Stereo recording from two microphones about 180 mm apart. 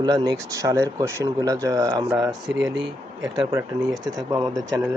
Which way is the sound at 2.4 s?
5° right (ahead or behind).